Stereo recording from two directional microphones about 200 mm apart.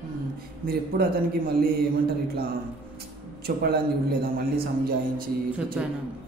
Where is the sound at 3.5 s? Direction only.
50° right (ahead or behind).